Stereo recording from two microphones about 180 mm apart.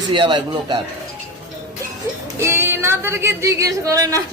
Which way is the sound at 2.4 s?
15° right (ahead or behind).